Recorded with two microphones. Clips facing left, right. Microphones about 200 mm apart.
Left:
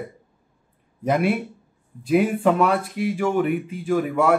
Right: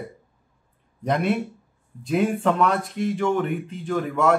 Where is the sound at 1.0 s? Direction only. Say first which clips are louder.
Left 2 dB; 5° left (ahead or behind).